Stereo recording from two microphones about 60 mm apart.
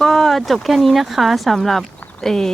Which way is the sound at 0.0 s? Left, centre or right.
Centre.